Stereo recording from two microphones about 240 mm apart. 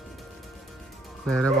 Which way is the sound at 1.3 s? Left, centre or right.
Centre.